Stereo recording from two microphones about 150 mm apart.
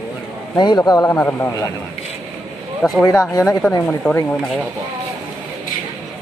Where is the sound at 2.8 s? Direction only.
5° left (ahead or behind).